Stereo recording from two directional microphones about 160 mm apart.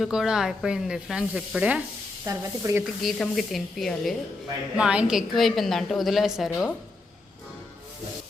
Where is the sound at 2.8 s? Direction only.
Centre (ahead or behind).